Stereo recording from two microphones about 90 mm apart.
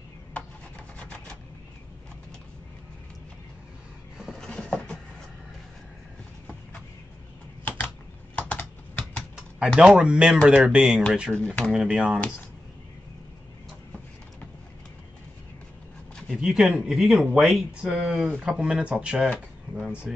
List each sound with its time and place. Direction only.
0.3 s rub: 15° left (ahead or behind)
4.4 s a sound: 10° left (ahead or behind)
7.6 s a sound: 15° left (ahead or behind)
8.4 s typing: 15° left (ahead or behind)
9.8 s speech: 10° right (ahead or behind)
11.3 s speech: 10° left (ahead or behind)
11.7 s speech: 10° right (ahead or behind)
16.3 s speech: 5° right (ahead or behind)